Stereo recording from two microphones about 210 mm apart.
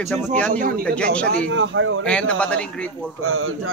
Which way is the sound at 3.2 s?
80° right.